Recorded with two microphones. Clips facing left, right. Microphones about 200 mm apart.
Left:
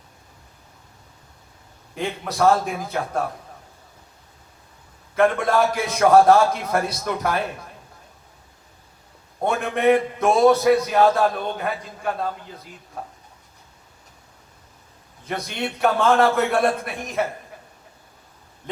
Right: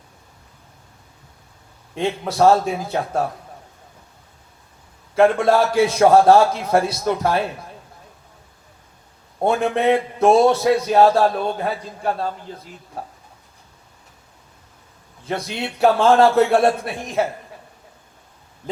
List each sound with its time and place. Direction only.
2.0 s a man's voice: 30° right (ahead or behind)
5.1 s a man's voice: 30° right (ahead or behind)
9.4 s a man's voice: 30° right (ahead or behind)
15.3 s a man's voice: 30° right (ahead or behind)